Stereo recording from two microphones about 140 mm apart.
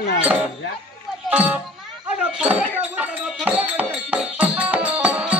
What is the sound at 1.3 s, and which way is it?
Speech, 10° right (ahead or behind).